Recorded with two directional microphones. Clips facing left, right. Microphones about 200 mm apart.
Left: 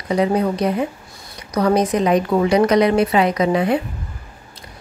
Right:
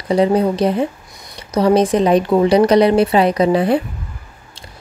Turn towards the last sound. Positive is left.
turn(degrees=-35)  # may be behind; listen again after turning